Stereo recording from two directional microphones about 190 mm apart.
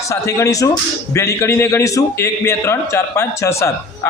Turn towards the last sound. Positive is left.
turn(degrees=15)  # may be behind; listen again after turning